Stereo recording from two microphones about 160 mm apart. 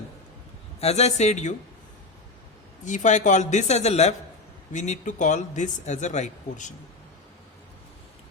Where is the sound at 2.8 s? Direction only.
50° left (ahead or behind).